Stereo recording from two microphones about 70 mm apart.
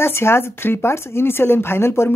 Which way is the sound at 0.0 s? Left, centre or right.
Left.